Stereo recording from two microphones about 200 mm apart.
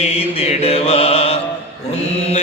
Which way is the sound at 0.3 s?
30° left (ahead or behind).